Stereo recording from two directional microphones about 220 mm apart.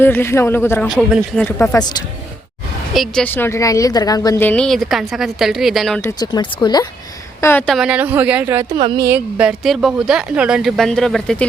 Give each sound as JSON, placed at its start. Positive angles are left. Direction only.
{"t": 0.0, "sound": "a man's voice", "side_deg": 10}
{"t": 2.9, "sound": "a woman's voice", "side_deg": 0}
{"t": 6.1, "sound": "speech", "side_deg": 20}
{"t": 7.4, "sound": "a woman's voice", "side_deg": 5}
{"t": 8.8, "sound": "speech", "side_deg": -20}
{"t": 9.0, "sound": "a woman's voice", "side_deg": -5}